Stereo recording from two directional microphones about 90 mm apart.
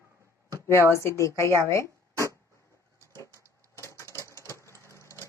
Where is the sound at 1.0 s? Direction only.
35° left (ahead or behind).